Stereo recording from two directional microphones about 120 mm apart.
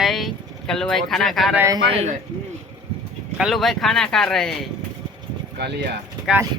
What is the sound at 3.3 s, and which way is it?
Speech, centre (ahead or behind).